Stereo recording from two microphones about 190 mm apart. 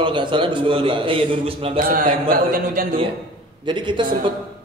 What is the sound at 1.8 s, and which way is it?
A woman's voice, 50° right (ahead or behind).